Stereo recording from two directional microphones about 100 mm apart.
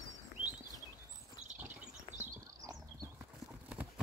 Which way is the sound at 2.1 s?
60° left (ahead or behind).